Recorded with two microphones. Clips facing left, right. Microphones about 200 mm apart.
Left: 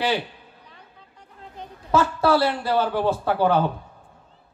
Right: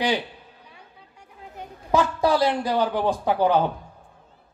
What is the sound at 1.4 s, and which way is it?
A man's voice, 15° right (ahead or behind).